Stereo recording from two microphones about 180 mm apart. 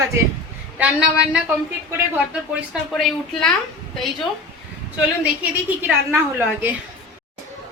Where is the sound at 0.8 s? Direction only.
5° right (ahead or behind).